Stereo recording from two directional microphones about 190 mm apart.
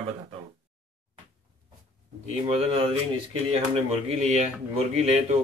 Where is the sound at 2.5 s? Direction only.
30° right (ahead or behind).